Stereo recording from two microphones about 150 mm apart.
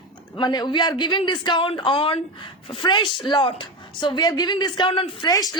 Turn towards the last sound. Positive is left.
turn(degrees=25)  # may be behind; listen again after turning